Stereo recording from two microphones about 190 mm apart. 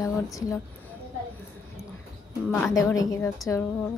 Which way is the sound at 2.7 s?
15° left (ahead or behind).